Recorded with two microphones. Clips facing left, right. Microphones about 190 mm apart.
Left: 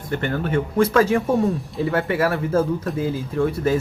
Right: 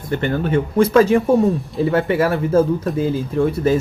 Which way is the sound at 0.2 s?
20° right (ahead or behind).